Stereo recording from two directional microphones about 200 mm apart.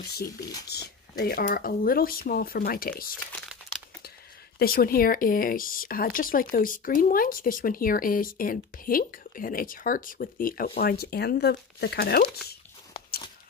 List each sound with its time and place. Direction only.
0.7 s speech: 55° left (ahead or behind)
4.6 s speech: 50° left (ahead or behind)